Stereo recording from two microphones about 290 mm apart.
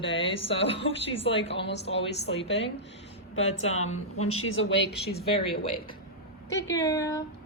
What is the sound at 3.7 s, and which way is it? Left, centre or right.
Speech, left.